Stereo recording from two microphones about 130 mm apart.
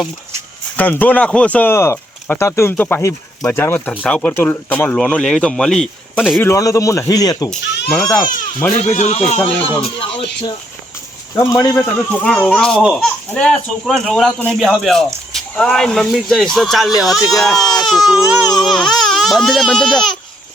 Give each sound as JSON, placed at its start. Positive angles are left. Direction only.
{"t": 0.8, "sound": "speech", "side_deg": 15}
{"t": 6.4, "sound": "a man's voice", "side_deg": 25}
{"t": 7.9, "sound": "speech", "side_deg": 5}
{"t": 8.7, "sound": "speech", "side_deg": 60}
{"t": 11.3, "sound": "a man's voice", "side_deg": 25}